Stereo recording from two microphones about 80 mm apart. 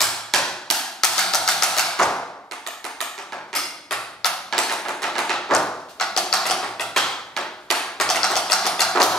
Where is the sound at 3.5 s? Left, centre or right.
Centre.